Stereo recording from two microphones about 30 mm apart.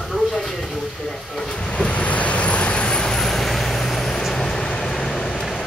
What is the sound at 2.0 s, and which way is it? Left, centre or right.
Vehicle, left.